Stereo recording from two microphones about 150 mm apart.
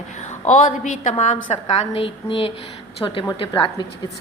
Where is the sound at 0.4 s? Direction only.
55° left (ahead or behind); by 2.5 s 35° left (ahead or behind).